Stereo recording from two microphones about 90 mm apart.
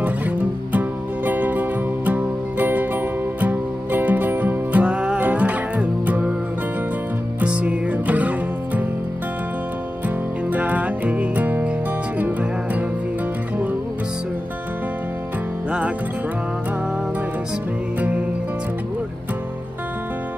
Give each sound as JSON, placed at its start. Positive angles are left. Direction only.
{"t": 0.7, "sound": "music", "side_deg": -20}
{"t": 7.3, "sound": "music", "side_deg": -15}
{"t": 10.0, "sound": "music", "side_deg": -15}